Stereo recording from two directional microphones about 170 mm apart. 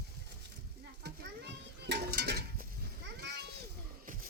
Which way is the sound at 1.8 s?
75° right (ahead or behind).